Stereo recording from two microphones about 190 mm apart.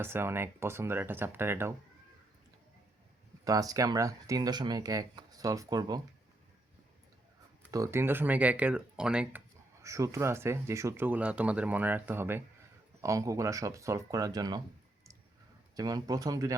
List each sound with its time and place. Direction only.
0.0 s speech: 10° right (ahead or behind)
3.4 s speech: 20° right (ahead or behind)
7.7 s speech: 15° right (ahead or behind)
9.8 s speech: 15° right (ahead or behind)
15.7 s speech: 20° right (ahead or behind)